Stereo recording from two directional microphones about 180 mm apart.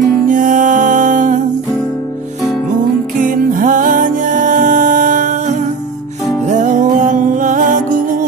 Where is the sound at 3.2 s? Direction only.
45° right (ahead or behind).